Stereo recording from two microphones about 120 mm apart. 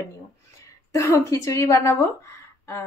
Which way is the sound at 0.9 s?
25° left (ahead or behind).